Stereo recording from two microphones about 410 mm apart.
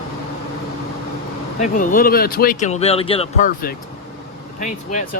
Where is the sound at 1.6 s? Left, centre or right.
Centre.